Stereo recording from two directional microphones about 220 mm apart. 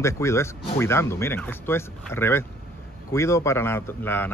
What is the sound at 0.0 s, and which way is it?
Speech, 15° left (ahead or behind).